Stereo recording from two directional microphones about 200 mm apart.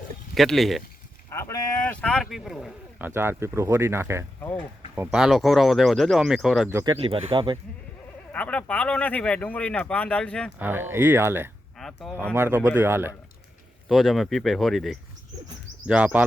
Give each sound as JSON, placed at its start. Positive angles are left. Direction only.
{"t": 0.3, "sound": "speech", "side_deg": 0}
{"t": 1.3, "sound": "a sound", "side_deg": 15}
{"t": 3.1, "sound": "speech", "side_deg": -10}
{"t": 4.4, "sound": "speech", "side_deg": 10}
{"t": 4.9, "sound": "speech", "side_deg": -5}
{"t": 6.7, "sound": "speech", "side_deg": -15}
{"t": 7.0, "sound": "speech", "side_deg": -25}
{"t": 8.3, "sound": "speech", "side_deg": 5}
{"t": 10.6, "sound": "speech", "side_deg": -10}
{"t": 11.8, "sound": "speech", "side_deg": 0}
{"t": 12.3, "sound": "speech", "side_deg": -10}
{"t": 13.8, "sound": "speech", "side_deg": 0}